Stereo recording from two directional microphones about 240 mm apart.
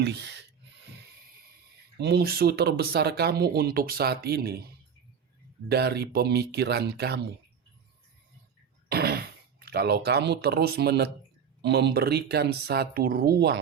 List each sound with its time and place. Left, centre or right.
0.0 s speech: right
2.0 s speech: right
5.6 s speech: right
8.9 s speech: right